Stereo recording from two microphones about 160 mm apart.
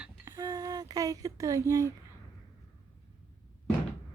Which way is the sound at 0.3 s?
25° right (ahead or behind).